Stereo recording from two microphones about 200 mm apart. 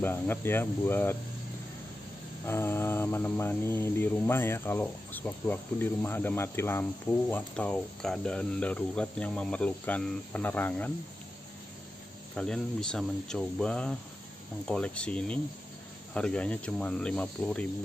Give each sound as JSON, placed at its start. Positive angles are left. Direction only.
{"t": 0.0, "sound": "speech", "side_deg": 10}
{"t": 2.4, "sound": "speech", "side_deg": 10}
{"t": 12.4, "sound": "speech", "side_deg": 5}